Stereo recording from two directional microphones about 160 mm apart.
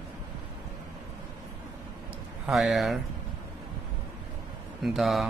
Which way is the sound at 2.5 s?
Centre (ahead or behind).